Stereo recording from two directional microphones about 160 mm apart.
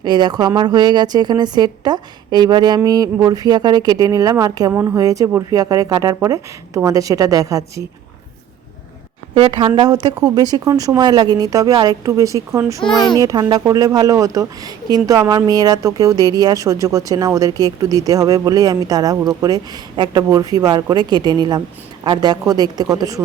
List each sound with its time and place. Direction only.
0.0 s speech: 25° right (ahead or behind)
9.5 s speech: 30° right (ahead or behind)
12.8 s a child's voice: 5° left (ahead or behind)
13.1 s speech: 20° right (ahead or behind)